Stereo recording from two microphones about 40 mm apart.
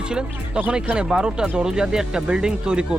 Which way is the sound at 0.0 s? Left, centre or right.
Right.